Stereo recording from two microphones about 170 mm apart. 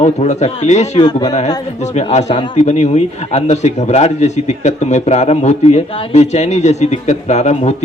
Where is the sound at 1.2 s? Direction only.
40° left (ahead or behind).